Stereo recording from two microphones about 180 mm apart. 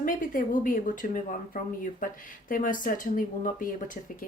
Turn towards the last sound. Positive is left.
turn(degrees=50)  # may be behind; listen again after turning